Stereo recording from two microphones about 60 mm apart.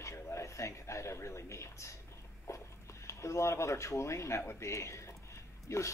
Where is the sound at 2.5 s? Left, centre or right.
Left.